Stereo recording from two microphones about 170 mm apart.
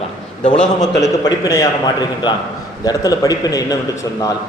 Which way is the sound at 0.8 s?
20° left (ahead or behind).